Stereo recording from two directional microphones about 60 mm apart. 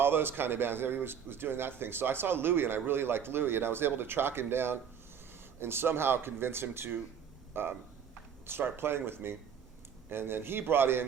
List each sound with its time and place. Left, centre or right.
0.0 s speech: right